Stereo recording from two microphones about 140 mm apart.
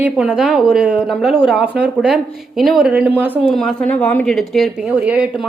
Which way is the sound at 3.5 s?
5° left (ahead or behind).